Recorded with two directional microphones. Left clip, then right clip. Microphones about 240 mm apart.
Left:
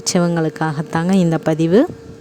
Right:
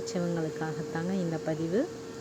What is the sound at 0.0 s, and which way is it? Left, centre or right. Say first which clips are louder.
Speech: left 14 dB; left.